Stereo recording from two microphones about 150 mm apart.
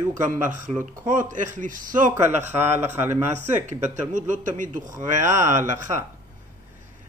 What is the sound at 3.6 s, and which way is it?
Speech, 55° right (ahead or behind).